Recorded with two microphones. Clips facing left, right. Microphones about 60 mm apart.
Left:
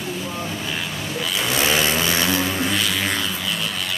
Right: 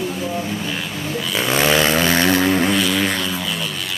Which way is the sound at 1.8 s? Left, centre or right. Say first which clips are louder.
Right 4 dB; right.